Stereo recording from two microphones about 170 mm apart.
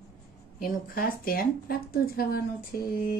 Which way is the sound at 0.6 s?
60° left (ahead or behind).